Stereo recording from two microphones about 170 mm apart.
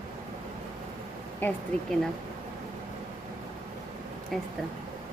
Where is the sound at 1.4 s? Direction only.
10° left (ahead or behind).